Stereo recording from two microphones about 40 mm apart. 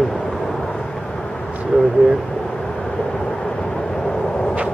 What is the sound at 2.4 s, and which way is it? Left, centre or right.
Vehicle, centre.